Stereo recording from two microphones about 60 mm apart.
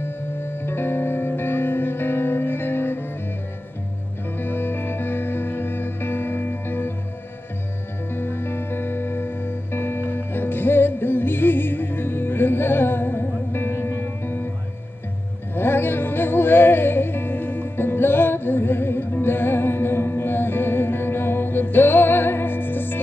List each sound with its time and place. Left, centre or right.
0.0 s music: left
4.4 s music: left
8.1 s music: left
15.5 s music: left